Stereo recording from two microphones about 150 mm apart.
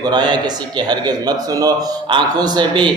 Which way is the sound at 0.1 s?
30° right (ahead or behind).